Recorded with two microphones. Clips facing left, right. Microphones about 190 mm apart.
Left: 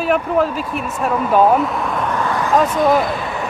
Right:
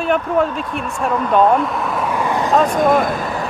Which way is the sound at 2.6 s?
50° right (ahead or behind).